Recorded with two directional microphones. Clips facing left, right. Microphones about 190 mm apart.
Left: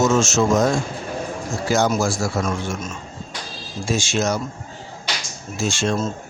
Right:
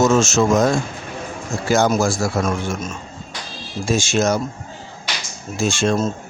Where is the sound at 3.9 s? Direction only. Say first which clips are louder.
Right 3 dB; 50° right (ahead or behind).